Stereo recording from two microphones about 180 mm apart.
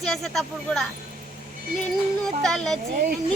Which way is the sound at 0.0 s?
5° left (ahead or behind).